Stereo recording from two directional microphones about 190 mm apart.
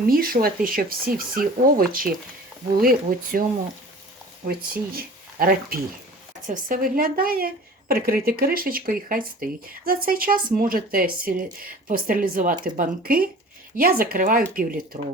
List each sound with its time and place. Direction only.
0.1 s a woman's voice: 50° right (ahead or behind)
4.4 s a woman's voice: 50° right (ahead or behind)